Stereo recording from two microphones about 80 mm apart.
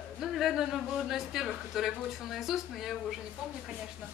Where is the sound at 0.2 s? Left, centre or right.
Centre.